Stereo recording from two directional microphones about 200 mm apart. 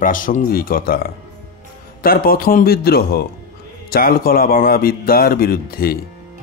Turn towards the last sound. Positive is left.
turn(degrees=50)  # may be behind; listen again after turning